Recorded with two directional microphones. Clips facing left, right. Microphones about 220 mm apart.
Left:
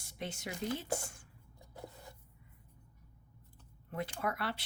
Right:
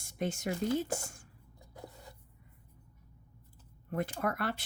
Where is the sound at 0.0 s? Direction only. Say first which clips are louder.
Right 7 dB; 45° right (ahead or behind).